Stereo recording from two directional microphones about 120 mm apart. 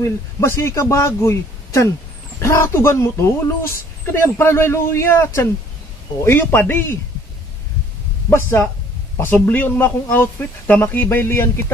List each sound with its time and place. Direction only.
0.0 s speech: 20° left (ahead or behind)
8.3 s speech: 20° left (ahead or behind)